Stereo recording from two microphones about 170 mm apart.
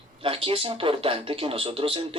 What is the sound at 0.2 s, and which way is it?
Speech, 35° right (ahead or behind).